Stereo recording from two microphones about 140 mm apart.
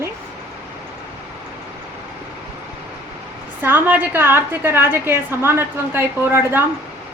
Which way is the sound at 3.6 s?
15° right (ahead or behind).